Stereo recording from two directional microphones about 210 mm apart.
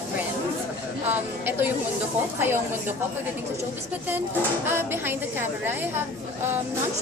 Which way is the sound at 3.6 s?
10° right (ahead or behind).